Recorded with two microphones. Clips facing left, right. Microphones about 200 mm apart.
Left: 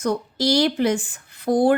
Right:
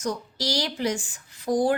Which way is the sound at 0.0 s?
60° left (ahead or behind).